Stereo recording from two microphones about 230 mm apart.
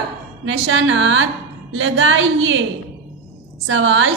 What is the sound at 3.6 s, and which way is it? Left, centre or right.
Speech, right.